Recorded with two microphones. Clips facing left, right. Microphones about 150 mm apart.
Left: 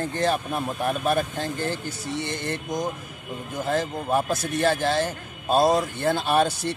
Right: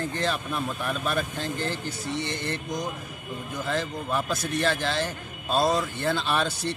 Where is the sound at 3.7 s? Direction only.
45° left (ahead or behind).